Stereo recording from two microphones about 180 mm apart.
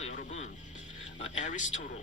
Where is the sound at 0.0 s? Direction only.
40° left (ahead or behind).